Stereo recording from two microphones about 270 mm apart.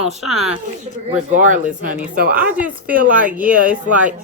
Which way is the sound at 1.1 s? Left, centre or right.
Right.